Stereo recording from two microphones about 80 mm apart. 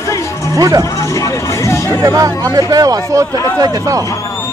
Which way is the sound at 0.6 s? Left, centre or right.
Right.